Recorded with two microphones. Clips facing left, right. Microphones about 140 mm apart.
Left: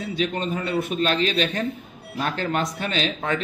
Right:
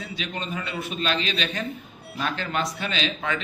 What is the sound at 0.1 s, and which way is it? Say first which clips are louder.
A man's voice: left 8 dB; 45° left (ahead or behind).